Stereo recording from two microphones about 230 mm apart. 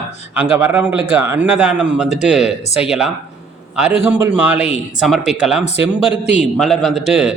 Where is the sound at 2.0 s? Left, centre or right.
Left.